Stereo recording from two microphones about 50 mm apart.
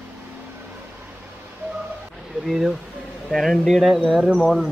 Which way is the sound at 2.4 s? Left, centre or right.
Centre.